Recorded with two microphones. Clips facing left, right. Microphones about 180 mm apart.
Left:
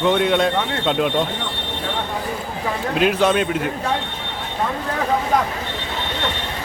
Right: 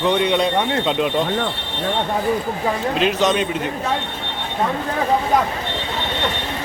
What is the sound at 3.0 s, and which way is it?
Speech, 5° left (ahead or behind).